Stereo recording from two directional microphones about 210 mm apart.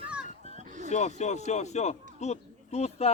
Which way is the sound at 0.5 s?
35° right (ahead or behind).